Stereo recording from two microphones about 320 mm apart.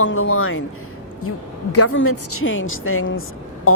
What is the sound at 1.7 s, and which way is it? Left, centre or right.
A woman's voice, left.